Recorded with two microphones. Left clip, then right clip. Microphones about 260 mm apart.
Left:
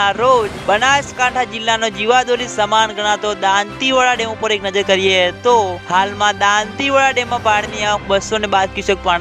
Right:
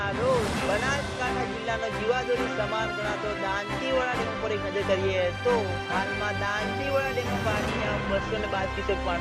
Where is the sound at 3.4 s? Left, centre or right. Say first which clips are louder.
Left 16 dB; left.